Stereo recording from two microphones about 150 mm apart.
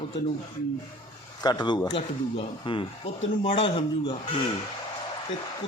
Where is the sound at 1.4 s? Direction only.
30° left (ahead or behind).